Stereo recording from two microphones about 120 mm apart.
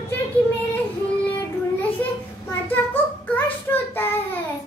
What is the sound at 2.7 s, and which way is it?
Child singing, 15° left (ahead or behind).